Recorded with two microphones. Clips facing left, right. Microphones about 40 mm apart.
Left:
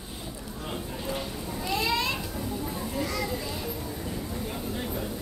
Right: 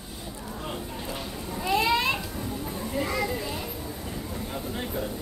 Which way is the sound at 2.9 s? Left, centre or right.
Right.